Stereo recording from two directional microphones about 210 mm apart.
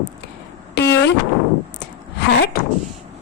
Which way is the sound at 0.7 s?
55° left (ahead or behind).